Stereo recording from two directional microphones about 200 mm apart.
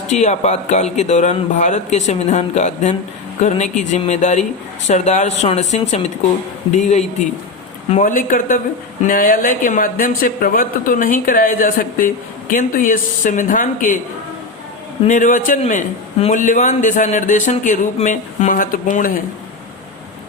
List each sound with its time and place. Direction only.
0.1 s a man's voice: 35° left (ahead or behind)
7.9 s speech: 40° left (ahead or behind)
15.0 s a man's voice: 40° left (ahead or behind)